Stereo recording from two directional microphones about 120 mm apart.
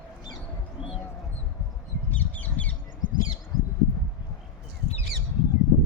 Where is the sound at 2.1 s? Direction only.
15° left (ahead or behind).